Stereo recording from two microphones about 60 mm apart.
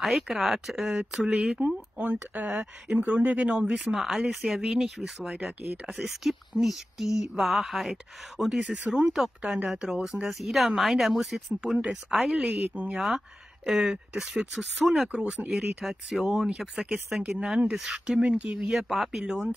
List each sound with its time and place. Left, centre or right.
0.0 s speech: centre
2.0 s speech: right
3.5 s speech: centre
12.5 s speech: right
12.9 s speech: centre